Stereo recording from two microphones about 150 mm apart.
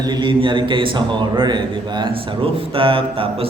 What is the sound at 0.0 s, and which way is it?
A man's voice, 30° right (ahead or behind).